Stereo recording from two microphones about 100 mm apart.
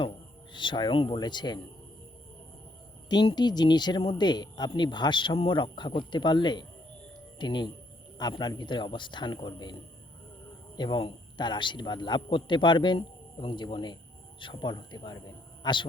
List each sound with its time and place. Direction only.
0.5 s speech: 50° left (ahead or behind)
3.3 s speech: 45° left (ahead or behind)
10.8 s a man's voice: 50° left (ahead or behind)